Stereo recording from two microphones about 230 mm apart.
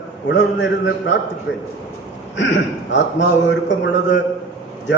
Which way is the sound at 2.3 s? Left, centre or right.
Left.